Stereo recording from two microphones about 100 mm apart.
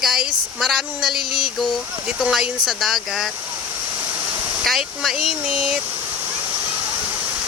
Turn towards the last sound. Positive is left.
turn(degrees=-5)  # may be behind; listen again after turning